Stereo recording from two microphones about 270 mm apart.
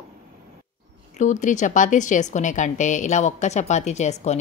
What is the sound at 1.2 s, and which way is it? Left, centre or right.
Speech, left.